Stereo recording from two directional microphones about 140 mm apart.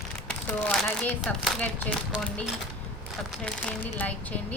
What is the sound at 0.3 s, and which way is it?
Speech, 5° left (ahead or behind).